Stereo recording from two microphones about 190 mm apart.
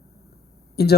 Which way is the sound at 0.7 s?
60° left (ahead or behind).